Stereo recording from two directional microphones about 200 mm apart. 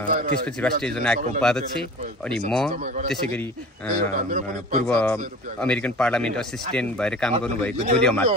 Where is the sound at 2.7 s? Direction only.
35° right (ahead or behind).